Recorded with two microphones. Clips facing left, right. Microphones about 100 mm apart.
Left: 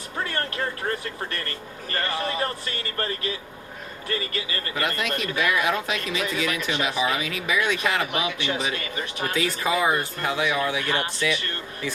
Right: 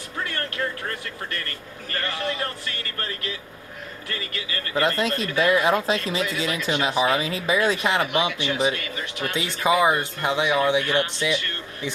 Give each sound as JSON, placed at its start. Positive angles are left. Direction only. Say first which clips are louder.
{"t": 0.3, "sound": "a man's voice", "louder": "right 1 dB", "side_deg": 30}
{"t": 4.7, "sound": "speech", "louder": "right 5 dB", "side_deg": -30}
{"t": 8.7, "sound": "a man's voice", "louder": "left 1 dB", "side_deg": 30}
{"t": 9.3, "sound": "speech", "louder": "right 3 dB", "side_deg": -25}